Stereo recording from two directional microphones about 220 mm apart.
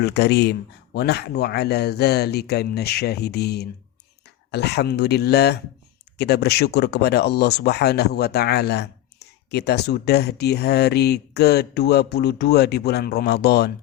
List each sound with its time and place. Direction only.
0.0 s speech: 50° left (ahead or behind)